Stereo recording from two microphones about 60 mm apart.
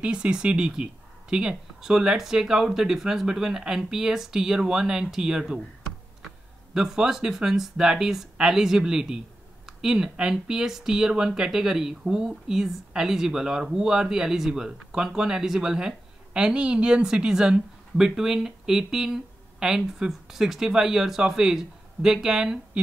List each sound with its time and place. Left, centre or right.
0.0 s speech: centre
6.7 s speech: centre